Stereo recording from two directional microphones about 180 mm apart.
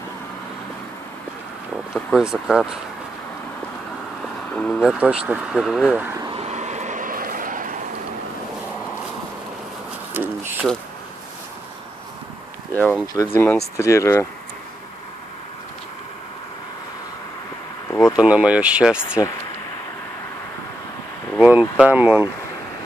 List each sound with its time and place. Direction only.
2.0 s speech: centre (ahead or behind)
4.6 s speech: 5° left (ahead or behind)
4.9 s speech: 5° right (ahead or behind)
6.1 s vehicle: 25° right (ahead or behind)
6.4 s vehicle: 40° right (ahead or behind)
10.1 s speech: 10° right (ahead or behind)
12.7 s speech: 10° left (ahead or behind)
13.0 s speech: 20° left (ahead or behind)
17.8 s a sound: 5° left (ahead or behind)
18.1 s speech: 5° right (ahead or behind)
19.2 s speech: 20° left (ahead or behind)
21.4 s speech: 5° right (ahead or behind)